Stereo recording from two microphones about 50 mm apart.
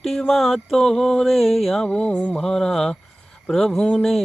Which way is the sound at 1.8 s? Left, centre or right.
Centre.